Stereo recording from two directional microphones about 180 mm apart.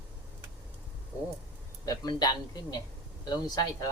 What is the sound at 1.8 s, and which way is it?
Speech, 20° left (ahead or behind).